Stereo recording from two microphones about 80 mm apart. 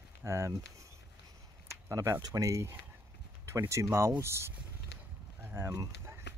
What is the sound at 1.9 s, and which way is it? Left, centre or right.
Speech, right.